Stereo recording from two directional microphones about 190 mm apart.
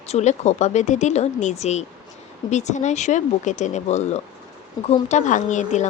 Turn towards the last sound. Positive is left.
turn(degrees=40)  # may be behind; listen again after turning